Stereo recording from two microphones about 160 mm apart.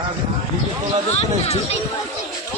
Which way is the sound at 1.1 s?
40° left (ahead or behind).